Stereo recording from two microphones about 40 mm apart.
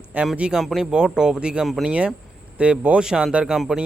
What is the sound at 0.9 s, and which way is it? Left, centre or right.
A man's voice, right.